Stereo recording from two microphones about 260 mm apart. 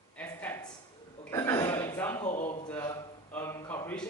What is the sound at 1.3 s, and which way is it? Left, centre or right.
Burping, centre.